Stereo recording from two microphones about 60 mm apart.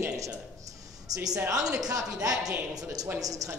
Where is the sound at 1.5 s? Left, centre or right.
Right.